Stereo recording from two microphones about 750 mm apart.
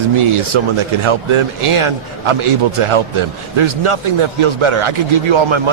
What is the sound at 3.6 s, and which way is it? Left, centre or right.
A man's voice, right.